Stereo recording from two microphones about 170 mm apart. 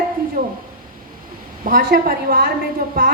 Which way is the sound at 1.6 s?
60° right (ahead or behind).